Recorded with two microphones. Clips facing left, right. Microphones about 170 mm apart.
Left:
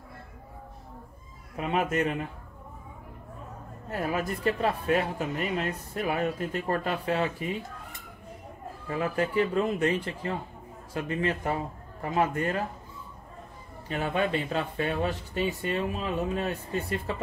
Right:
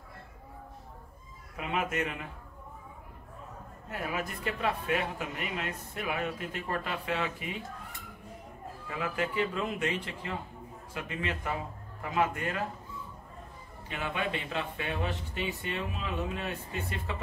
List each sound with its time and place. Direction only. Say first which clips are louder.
1.6 s speech: left 5 dB; 35° left (ahead or behind)
3.9 s speech: left 6 dB; 40° left (ahead or behind)
8.8 s speech: left 5 dB; 40° left (ahead or behind)
13.8 s speech: left 6 dB; 40° left (ahead or behind)